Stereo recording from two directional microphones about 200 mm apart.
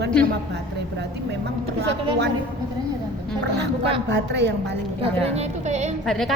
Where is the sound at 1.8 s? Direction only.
55° right (ahead or behind).